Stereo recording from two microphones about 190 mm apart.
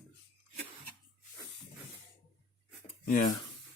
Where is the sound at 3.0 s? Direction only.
50° left (ahead or behind).